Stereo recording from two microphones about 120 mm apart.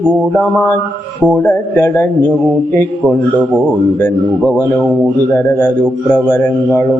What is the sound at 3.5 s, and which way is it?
Speech, 10° left (ahead or behind).